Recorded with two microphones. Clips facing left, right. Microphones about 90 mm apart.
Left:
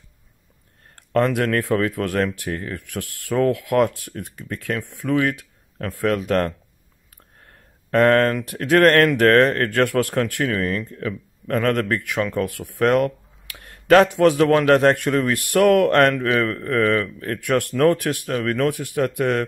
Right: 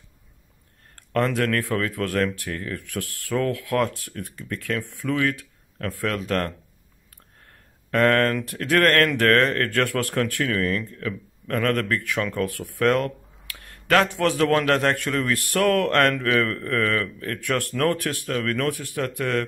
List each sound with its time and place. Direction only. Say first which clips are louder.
0.9 s speech: left 4 dB; 20° left (ahead or behind)
7.9 s a man's voice: left 4 dB; 20° left (ahead or behind)